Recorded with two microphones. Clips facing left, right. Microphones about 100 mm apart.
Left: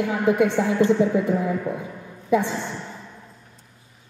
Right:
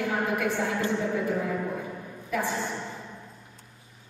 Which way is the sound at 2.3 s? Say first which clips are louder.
Left 9 dB; 25° left (ahead or behind).